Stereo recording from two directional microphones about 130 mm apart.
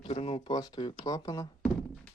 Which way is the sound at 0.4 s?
30° left (ahead or behind).